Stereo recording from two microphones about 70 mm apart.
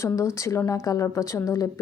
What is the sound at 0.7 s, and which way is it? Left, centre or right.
Speech, left.